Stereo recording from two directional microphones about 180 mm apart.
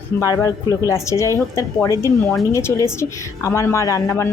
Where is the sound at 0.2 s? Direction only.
20° left (ahead or behind).